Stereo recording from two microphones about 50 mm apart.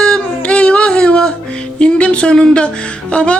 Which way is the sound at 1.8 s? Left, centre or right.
Left.